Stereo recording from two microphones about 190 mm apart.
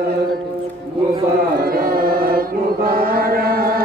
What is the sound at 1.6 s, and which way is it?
Carnatic music, 50° right (ahead or behind).